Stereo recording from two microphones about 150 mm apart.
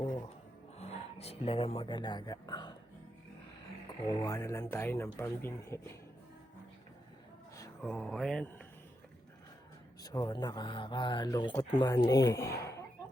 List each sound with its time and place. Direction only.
0.8 s speech: 45° left (ahead or behind)
4.0 s speech: 25° left (ahead or behind)
7.8 s speech: 5° left (ahead or behind)
10.0 s speech: 25° left (ahead or behind)
12.0 s speech: 20° left (ahead or behind)